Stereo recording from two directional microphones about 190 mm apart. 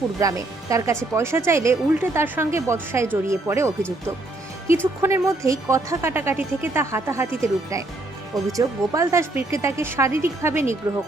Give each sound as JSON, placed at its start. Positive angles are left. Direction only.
{"t": 0.2, "sound": "a woman's voice", "side_deg": -15}
{"t": 5.0, "sound": "a woman's voice", "side_deg": -15}